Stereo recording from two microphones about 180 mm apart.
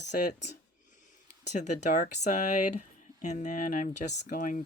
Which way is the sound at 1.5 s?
40° left (ahead or behind).